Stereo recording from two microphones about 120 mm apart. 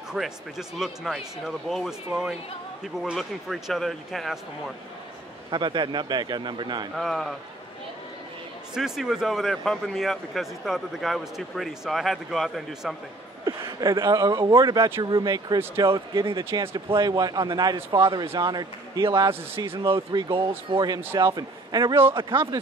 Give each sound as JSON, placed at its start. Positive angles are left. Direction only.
{"t": 0.1, "sound": "speech", "side_deg": -5}
{"t": 3.0, "sound": "speech", "side_deg": 0}
{"t": 5.5, "sound": "a man's voice", "side_deg": -40}
{"t": 7.0, "sound": "speech", "side_deg": 0}
{"t": 8.7, "sound": "speech", "side_deg": -5}
{"t": 13.5, "sound": "a man's voice", "side_deg": -30}
{"t": 16.4, "sound": "speech", "side_deg": -20}
{"t": 16.7, "sound": "a man's voice", "side_deg": -35}